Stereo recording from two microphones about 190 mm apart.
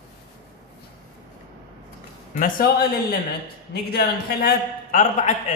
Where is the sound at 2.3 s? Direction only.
45° left (ahead or behind).